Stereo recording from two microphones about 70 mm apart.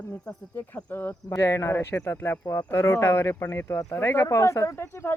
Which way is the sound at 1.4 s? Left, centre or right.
Left.